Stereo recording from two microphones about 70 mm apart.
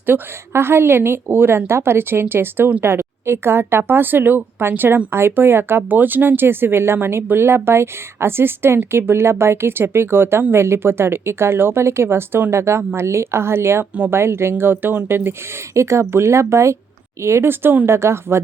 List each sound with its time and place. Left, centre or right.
0.0 s speech: right